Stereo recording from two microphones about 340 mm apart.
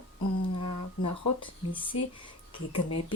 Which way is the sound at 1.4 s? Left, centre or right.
Centre.